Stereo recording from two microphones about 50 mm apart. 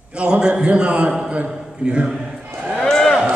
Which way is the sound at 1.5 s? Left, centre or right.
Centre.